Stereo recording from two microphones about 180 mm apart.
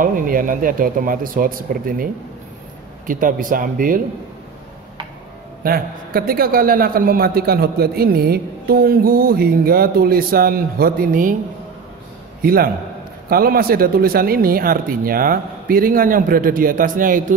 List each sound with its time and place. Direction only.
0.0 s speech: 50° right (ahead or behind)
3.1 s speech: 50° right (ahead or behind)
5.6 s a man's voice: 55° right (ahead or behind)
12.4 s a man's voice: 55° right (ahead or behind)